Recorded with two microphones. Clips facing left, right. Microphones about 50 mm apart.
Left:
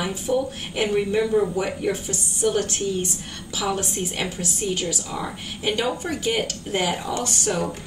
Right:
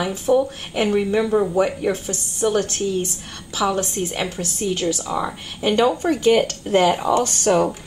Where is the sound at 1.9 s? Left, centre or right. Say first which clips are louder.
Right 3 dB; centre.